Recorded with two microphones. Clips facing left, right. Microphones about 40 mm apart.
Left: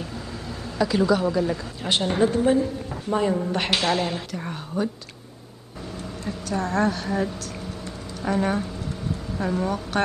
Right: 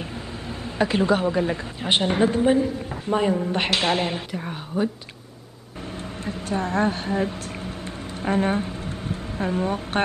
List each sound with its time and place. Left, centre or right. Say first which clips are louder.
0.7 s a woman's voice: even; right; by 3.3 s centre
3.8 s a woman's voice: right 1 dB; right
6.2 s a woman's voice: right 1 dB; right